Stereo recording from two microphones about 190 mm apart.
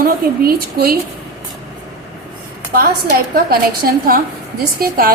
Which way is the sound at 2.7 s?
50° right (ahead or behind).